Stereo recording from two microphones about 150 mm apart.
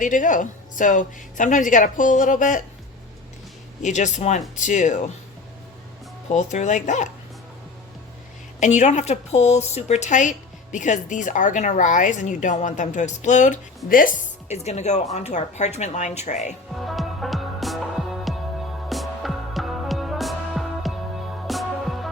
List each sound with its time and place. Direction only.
0.0 s speech: 60° left (ahead or behind)
3.8 s speech: 55° left (ahead or behind)
6.2 s speech: 50° left (ahead or behind)
8.6 s speech: 50° left (ahead or behind); by 14.1 s 70° left (ahead or behind)
14.4 s speech: 45° left (ahead or behind)
16.8 s music: centre (ahead or behind)